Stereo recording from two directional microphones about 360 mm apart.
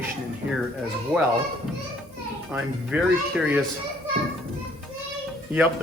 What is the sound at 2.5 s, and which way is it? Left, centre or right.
Speech, centre.